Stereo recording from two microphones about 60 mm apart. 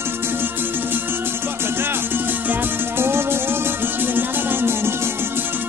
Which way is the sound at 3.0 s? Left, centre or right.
Right.